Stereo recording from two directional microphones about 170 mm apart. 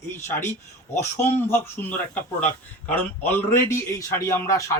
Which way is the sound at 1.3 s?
15° left (ahead or behind).